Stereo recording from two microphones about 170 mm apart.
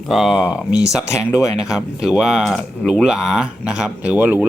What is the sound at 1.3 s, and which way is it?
Speech, 20° left (ahead or behind).